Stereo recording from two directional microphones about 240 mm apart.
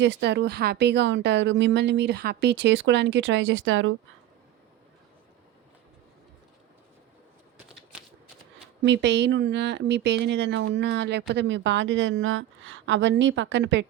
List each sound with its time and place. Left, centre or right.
0.0 s speech: right
8.8 s speech: right